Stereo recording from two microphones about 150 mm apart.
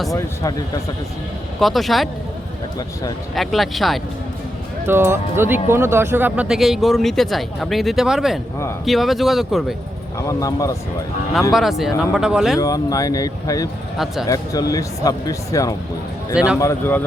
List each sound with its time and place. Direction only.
0.1 s speech: 20° left (ahead or behind)
1.5 s speech: centre (ahead or behind)
3.3 s speech: centre (ahead or behind)
4.9 s speech: 15° right (ahead or behind)
10.2 s speech: 20° left (ahead or behind)
11.8 s speech: centre (ahead or behind)
12.5 s speech: 20° left (ahead or behind)
16.3 s speech: 5° right (ahead or behind)
16.6 s speech: 15° left (ahead or behind)